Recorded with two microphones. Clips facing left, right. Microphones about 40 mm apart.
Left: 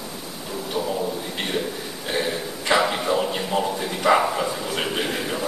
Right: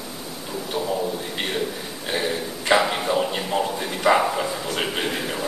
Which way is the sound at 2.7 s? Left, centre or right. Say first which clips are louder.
Right 1 dB; centre.